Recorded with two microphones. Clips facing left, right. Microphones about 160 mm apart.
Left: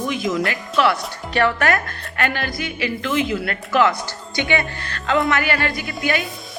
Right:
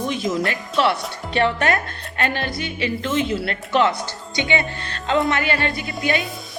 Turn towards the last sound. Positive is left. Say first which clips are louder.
# even
turn(degrees=-25)  # may be behind; listen again after turning